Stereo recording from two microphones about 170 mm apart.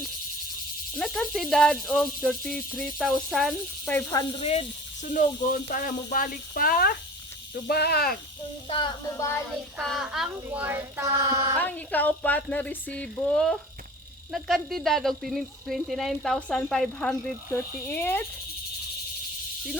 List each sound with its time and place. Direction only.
0.9 s speech: centre (ahead or behind)
3.8 s speech: 10° left (ahead or behind)
4.4 s speech: 35° left (ahead or behind)
5.1 s speech: 50° left (ahead or behind)
8.7 s child singing: 25° left (ahead or behind)
9.5 s speech: centre (ahead or behind)
11.2 s a woman's voice: 20° right (ahead or behind)
11.6 s speech: 10° left (ahead or behind)